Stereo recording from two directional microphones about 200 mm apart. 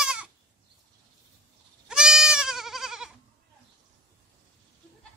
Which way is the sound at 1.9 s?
5° right (ahead or behind).